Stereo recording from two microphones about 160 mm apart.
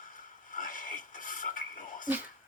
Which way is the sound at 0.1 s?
55° left (ahead or behind).